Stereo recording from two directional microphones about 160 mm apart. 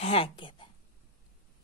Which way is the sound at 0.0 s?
35° left (ahead or behind).